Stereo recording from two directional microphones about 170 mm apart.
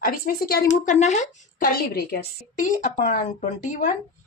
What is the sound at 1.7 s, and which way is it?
A woman's voice, 60° left (ahead or behind).